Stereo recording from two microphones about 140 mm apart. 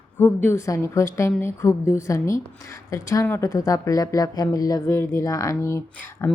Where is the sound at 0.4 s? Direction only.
20° left (ahead or behind).